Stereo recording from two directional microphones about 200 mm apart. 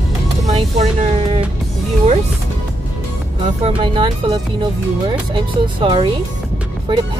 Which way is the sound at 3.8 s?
25° right (ahead or behind).